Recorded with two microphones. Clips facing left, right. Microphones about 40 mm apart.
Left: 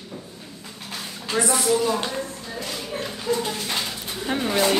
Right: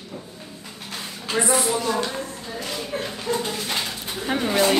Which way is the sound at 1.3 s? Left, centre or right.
Right.